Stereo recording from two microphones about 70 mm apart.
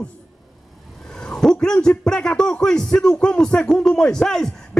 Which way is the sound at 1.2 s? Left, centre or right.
Centre.